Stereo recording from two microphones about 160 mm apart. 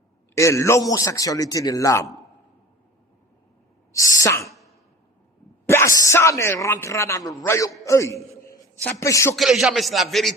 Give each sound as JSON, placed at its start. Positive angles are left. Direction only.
{"t": 0.3, "sound": "a man's voice", "side_deg": 20}
{"t": 3.9, "sound": "a man's voice", "side_deg": 20}
{"t": 5.6, "sound": "speech", "side_deg": 15}
{"t": 9.3, "sound": "speech", "side_deg": 0}